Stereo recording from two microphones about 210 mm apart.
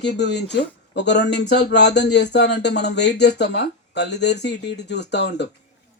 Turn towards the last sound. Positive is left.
turn(degrees=55)  # may be behind; listen again after turning